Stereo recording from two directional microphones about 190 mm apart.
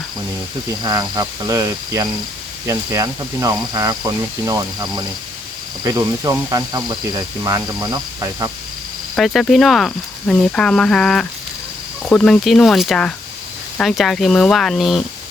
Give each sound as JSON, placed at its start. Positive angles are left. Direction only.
{"t": 0.8, "sound": "speech", "side_deg": -20}
{"t": 9.1, "sound": "speech", "side_deg": 0}